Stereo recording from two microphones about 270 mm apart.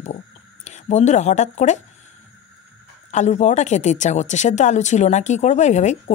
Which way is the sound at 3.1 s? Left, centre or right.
Left.